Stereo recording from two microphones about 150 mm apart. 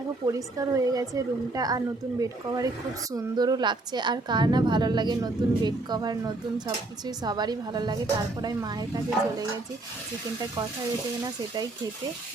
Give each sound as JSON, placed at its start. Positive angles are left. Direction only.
{"t": 0.3, "sound": "a woman's voice", "side_deg": -20}